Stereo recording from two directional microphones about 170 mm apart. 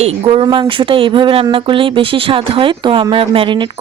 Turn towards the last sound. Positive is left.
turn(degrees=-30)  # may be behind; listen again after turning